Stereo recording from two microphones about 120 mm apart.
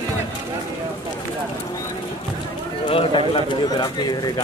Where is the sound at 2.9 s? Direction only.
45° left (ahead or behind).